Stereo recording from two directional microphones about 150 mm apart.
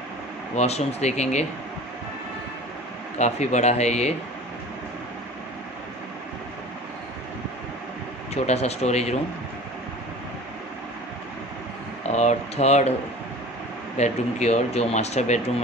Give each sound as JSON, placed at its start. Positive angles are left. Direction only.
{"t": 0.6, "sound": "speech", "side_deg": 45}
{"t": 3.2, "sound": "speech", "side_deg": 50}
{"t": 8.5, "sound": "speech", "side_deg": 45}
{"t": 12.1, "sound": "speech", "side_deg": 50}
{"t": 13.9, "sound": "speech", "side_deg": 50}